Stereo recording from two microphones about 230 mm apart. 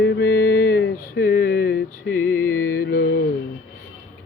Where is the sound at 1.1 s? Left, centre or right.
Left.